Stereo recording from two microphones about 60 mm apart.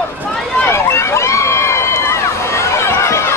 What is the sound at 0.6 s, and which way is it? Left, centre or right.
Run, left.